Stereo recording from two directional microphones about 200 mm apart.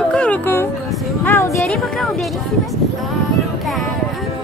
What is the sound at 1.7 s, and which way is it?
Speech, centre (ahead or behind).